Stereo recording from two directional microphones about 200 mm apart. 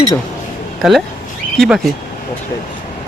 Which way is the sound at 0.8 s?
Centre (ahead or behind).